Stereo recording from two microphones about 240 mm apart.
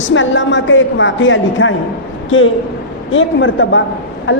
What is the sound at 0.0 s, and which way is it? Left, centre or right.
A woman's voice, left.